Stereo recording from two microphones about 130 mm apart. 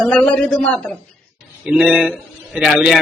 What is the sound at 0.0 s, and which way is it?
Speech, 5° left (ahead or behind).